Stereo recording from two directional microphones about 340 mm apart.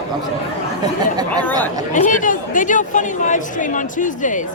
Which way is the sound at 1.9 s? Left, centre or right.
Left.